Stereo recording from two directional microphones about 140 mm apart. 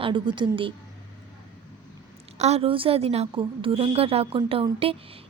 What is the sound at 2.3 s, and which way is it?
A woman's voice, 50° right (ahead or behind).